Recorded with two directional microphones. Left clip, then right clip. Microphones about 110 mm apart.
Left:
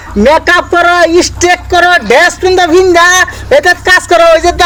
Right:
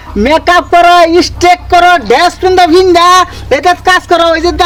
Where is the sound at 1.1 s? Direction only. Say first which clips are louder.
Even; 45° right (ahead or behind).